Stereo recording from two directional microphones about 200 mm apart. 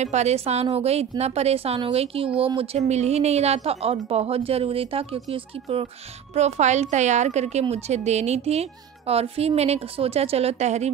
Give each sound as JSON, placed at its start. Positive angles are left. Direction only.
{"t": 0.0, "sound": "a woman's voice", "side_deg": -35}